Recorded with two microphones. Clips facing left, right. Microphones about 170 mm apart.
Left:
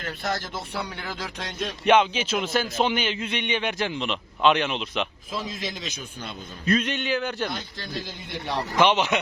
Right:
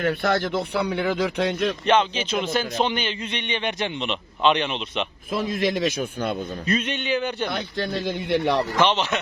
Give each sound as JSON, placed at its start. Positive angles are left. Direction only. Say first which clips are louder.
{"t": 0.0, "sound": "speech", "louder": "right 8 dB", "side_deg": -65}
{"t": 1.8, "sound": "a man's voice", "louder": "left 4 dB", "side_deg": 10}
{"t": 5.3, "sound": "speech", "louder": "right 9 dB", "side_deg": -60}
{"t": 6.7, "sound": "a man's voice", "louder": "left 1 dB", "side_deg": 0}
{"t": 7.5, "sound": "speech", "louder": "right 7 dB", "side_deg": -60}
{"t": 8.7, "sound": "speech", "louder": "left 1 dB", "side_deg": 10}